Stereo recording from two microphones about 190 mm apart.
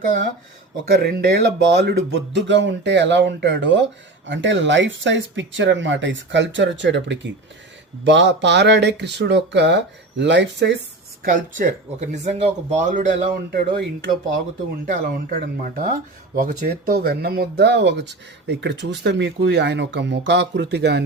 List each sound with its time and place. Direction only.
1.0 s speech: 55° right (ahead or behind)
11.3 s speech: 40° right (ahead or behind)
13.5 s speech: 50° right (ahead or behind)
14.8 s speech: 50° right (ahead or behind)